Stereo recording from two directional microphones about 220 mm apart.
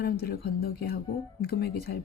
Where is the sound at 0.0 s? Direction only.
45° left (ahead or behind).